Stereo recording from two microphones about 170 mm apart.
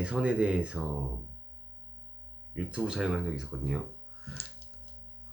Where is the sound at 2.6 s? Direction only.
5° right (ahead or behind).